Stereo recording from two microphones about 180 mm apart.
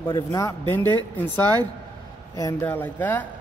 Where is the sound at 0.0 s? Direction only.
20° left (ahead or behind).